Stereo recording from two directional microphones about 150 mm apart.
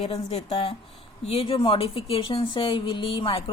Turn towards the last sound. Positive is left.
turn(degrees=35)  # may be behind; listen again after turning